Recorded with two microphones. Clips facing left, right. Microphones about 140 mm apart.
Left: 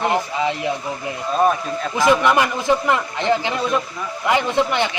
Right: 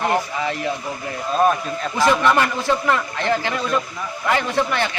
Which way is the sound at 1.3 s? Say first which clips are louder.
Even; centre (ahead or behind).